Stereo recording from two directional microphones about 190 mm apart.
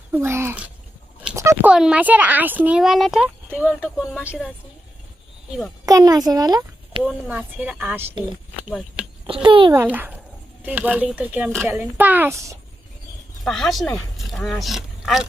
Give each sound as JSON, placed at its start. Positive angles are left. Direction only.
{"t": 0.1, "sound": "speech", "side_deg": -15}
{"t": 5.8, "sound": "a child's voice", "side_deg": -20}
{"t": 7.0, "sound": "speech", "side_deg": -5}
{"t": 9.2, "sound": "a child's voice", "side_deg": -25}
{"t": 9.7, "sound": "speech", "side_deg": -10}
{"t": 13.4, "sound": "speech", "side_deg": 0}